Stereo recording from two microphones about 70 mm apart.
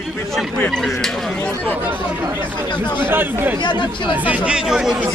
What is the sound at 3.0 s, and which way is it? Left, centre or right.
Speech, right.